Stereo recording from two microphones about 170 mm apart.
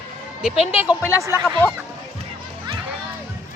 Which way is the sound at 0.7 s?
35° left (ahead or behind).